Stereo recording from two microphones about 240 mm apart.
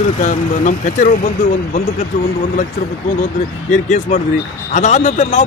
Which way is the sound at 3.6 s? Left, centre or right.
Left.